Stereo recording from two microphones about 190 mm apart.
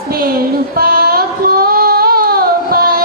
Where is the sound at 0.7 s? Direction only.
50° right (ahead or behind).